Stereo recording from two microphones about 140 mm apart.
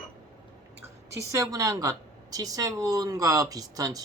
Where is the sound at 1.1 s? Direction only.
25° right (ahead or behind).